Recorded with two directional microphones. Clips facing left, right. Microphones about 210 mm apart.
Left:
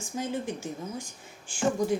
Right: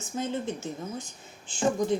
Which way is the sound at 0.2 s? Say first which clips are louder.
Right 1 dB; 10° left (ahead or behind).